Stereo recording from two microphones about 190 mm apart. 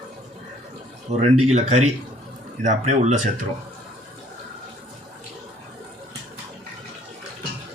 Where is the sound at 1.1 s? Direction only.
35° right (ahead or behind).